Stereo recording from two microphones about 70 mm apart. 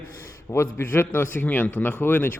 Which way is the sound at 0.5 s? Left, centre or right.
Left.